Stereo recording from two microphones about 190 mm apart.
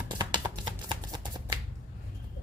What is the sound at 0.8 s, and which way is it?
Shuffling cards, 25° right (ahead or behind).